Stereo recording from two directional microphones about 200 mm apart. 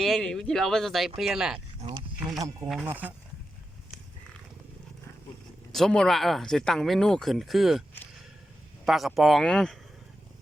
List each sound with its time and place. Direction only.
0.0 s speech: centre (ahead or behind)
1.8 s a sound: 25° right (ahead or behind)
2.8 s speech: 10° right (ahead or behind)
5.7 s speech: 5° left (ahead or behind)